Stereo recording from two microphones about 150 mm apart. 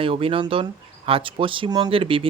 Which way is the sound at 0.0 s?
40° right (ahead or behind).